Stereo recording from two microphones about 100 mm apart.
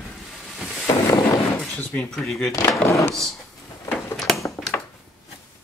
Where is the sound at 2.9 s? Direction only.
30° left (ahead or behind).